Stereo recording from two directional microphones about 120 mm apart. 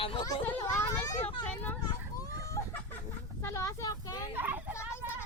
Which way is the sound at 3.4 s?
25° left (ahead or behind).